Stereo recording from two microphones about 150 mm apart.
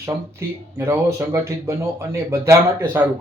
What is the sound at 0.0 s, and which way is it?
Speech, 20° right (ahead or behind).